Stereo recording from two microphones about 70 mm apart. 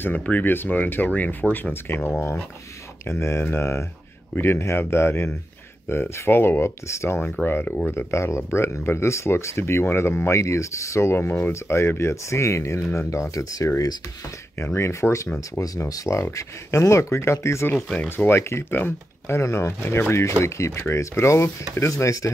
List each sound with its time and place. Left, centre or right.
0.0 s speech: left
14.6 s speech: left
17.9 s speech: left